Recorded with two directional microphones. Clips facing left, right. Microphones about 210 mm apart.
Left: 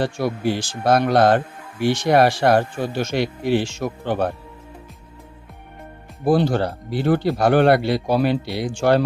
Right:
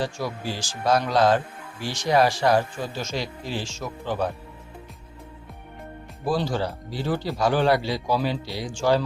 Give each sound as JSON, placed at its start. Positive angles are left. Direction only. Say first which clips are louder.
{"t": 0.0, "sound": "speech", "louder": "left 7 dB", "side_deg": 60}
{"t": 6.2, "sound": "speech", "louder": "left 7 dB", "side_deg": 60}